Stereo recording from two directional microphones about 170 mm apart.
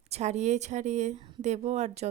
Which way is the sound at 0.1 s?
40° right (ahead or behind).